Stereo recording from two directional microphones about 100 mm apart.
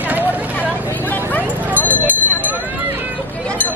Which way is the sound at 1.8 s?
15° left (ahead or behind).